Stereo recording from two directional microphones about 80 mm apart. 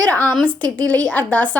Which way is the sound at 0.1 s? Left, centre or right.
Left.